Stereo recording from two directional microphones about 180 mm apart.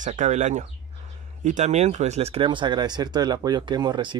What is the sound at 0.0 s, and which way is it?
Speech, 40° right (ahead or behind).